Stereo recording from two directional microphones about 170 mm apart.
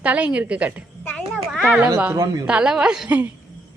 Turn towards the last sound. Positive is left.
turn(degrees=-5)  # may be behind; listen again after turning